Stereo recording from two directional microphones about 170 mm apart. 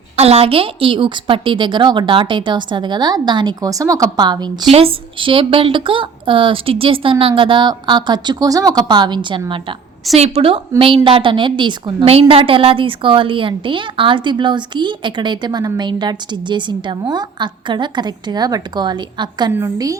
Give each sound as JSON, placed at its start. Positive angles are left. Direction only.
{"t": 0.2, "sound": "a woman's voice", "side_deg": -35}